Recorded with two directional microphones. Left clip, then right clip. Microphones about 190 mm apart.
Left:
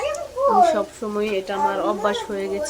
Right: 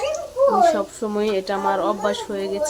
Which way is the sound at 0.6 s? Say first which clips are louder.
Right 1 dB; 10° right (ahead or behind).